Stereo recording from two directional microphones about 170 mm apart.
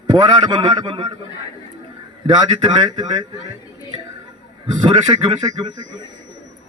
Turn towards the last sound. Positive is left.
turn(degrees=-20)  # may be behind; listen again after turning